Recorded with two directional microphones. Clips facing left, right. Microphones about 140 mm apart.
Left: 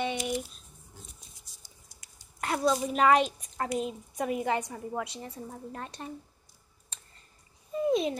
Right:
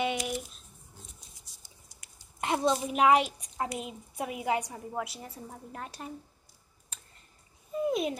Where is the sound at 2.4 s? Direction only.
20° right (ahead or behind).